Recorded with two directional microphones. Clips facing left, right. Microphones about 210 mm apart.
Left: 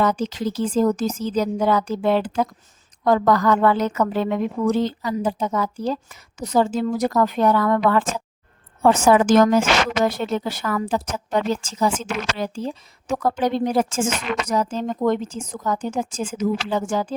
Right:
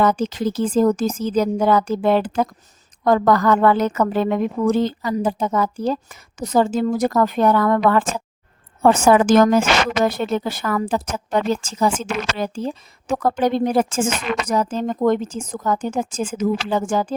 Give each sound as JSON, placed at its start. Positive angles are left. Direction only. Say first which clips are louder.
{"t": 0.0, "sound": "a woman's voice", "louder": "right 3 dB", "side_deg": -50}